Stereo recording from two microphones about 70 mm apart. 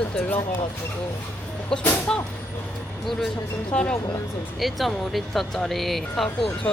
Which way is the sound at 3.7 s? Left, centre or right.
Centre.